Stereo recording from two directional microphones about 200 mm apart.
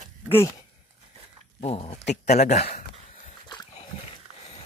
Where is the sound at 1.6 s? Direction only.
30° left (ahead or behind).